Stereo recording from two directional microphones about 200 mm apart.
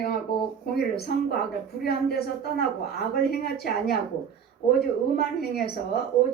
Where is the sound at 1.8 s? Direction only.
50° left (ahead or behind).